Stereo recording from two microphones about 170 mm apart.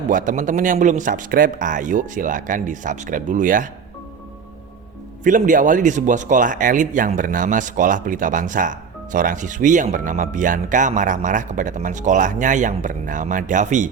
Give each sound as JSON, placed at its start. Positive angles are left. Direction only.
{"t": 0.1, "sound": "speech", "side_deg": -50}
{"t": 5.2, "sound": "speech", "side_deg": -50}